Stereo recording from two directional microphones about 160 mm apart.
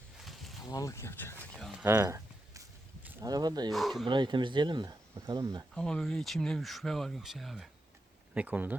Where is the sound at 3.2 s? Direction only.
25° right (ahead or behind).